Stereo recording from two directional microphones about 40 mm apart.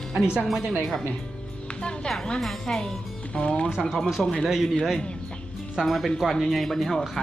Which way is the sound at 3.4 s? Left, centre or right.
Left.